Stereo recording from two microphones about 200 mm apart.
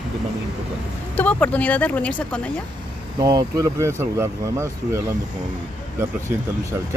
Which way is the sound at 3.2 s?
15° right (ahead or behind).